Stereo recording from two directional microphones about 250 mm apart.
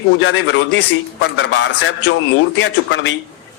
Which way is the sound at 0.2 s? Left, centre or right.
Left.